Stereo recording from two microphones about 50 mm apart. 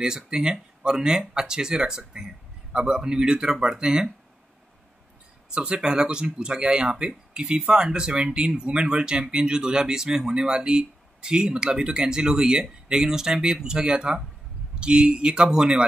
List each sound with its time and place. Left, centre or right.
0.0 s speech: centre
5.5 s speech: centre